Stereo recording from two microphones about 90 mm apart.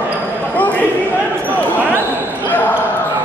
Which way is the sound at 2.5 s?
20° left (ahead or behind).